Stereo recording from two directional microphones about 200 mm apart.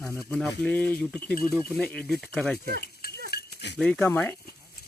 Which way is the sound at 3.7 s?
5° left (ahead or behind).